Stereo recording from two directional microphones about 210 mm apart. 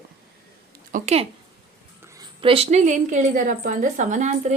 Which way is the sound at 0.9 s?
30° right (ahead or behind).